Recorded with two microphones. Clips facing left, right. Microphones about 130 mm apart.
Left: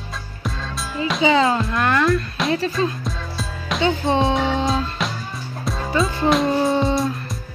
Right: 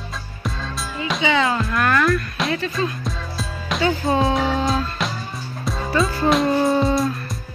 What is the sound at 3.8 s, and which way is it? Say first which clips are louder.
Music: even; 25° left (ahead or behind).